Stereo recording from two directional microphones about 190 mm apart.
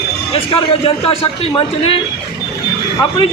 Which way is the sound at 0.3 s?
25° left (ahead or behind).